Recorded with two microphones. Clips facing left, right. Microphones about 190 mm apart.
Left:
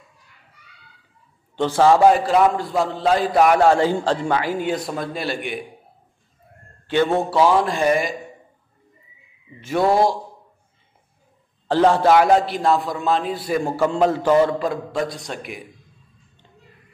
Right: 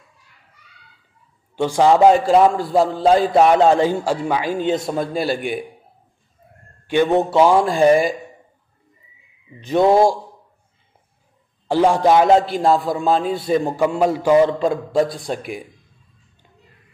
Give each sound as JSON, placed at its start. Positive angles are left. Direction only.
{"t": 1.6, "sound": "a man's voice", "side_deg": -15}
{"t": 6.9, "sound": "a man's voice", "side_deg": -15}
{"t": 9.6, "sound": "a man's voice", "side_deg": -20}
{"t": 11.6, "sound": "a man's voice", "side_deg": -10}
{"t": 14.6, "sound": "a man's voice", "side_deg": -25}